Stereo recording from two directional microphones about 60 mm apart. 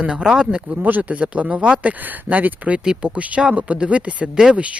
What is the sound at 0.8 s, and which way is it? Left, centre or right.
Speech, right.